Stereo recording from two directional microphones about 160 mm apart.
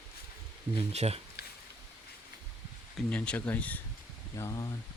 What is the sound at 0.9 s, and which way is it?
Speech, 40° right (ahead or behind).